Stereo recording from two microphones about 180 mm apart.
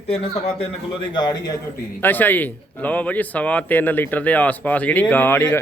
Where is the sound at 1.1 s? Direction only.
25° left (ahead or behind).